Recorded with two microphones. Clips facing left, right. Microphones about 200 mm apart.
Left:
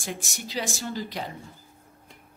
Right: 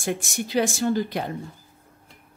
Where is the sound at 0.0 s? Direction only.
55° right (ahead or behind).